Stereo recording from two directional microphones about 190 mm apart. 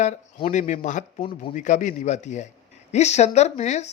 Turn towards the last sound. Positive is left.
turn(degrees=35)  # may be behind; listen again after turning